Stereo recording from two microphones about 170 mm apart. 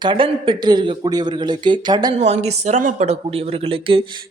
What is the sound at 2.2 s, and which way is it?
A woman's voice, 40° right (ahead or behind).